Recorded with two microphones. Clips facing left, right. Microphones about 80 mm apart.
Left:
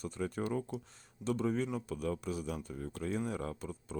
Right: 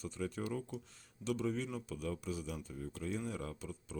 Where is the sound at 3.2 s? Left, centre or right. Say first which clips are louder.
Left 4 dB; left.